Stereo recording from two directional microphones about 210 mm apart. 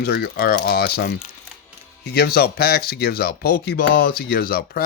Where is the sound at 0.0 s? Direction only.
50° left (ahead or behind).